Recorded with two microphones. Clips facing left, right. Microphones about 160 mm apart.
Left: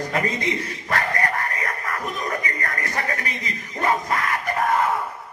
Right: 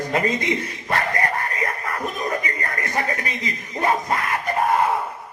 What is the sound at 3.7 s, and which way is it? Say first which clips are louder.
Speech: right 1 dB; 25° right (ahead or behind).